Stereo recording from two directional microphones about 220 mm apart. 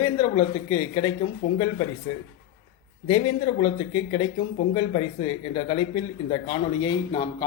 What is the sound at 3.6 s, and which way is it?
Speech, 25° left (ahead or behind).